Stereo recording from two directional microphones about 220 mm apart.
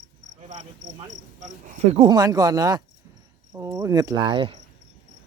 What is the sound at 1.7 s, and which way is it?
Speech, 25° right (ahead or behind).